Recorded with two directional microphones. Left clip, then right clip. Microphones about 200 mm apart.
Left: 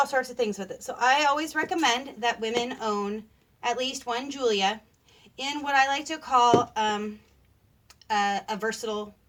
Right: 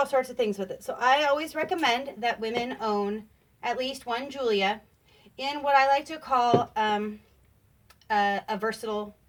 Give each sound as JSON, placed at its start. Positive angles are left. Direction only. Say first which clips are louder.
{"t": 0.0, "sound": "speech", "louder": "even", "side_deg": -20}